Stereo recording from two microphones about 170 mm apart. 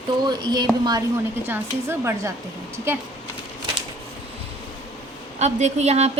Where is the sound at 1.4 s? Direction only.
15° right (ahead or behind).